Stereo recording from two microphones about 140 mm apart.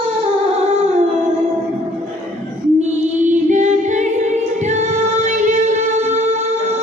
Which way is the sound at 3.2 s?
60° right (ahead or behind).